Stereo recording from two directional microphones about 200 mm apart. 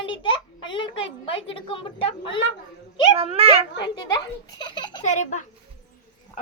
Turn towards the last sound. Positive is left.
turn(degrees=35)  # may be behind; listen again after turning